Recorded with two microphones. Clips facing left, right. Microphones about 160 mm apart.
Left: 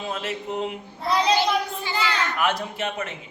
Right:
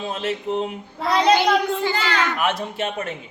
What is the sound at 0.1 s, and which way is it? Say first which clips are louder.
Speech: right 5 dB; 30° right (ahead or behind).